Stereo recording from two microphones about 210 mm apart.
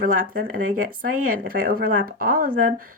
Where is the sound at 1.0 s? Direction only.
45° right (ahead or behind).